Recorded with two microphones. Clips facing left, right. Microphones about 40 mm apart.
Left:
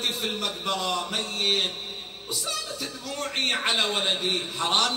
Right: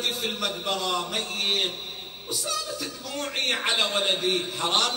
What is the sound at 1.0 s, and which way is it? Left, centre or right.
Speech, left.